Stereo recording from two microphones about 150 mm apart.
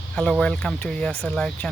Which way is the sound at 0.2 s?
5° left (ahead or behind).